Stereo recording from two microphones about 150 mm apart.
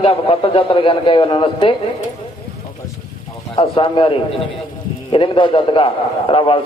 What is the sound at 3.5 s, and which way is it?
A man's voice, 35° left (ahead or behind).